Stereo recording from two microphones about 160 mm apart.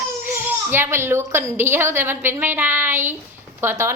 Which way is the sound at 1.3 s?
15° right (ahead or behind).